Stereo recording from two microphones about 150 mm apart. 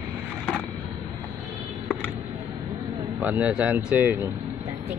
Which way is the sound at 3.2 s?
10° right (ahead or behind).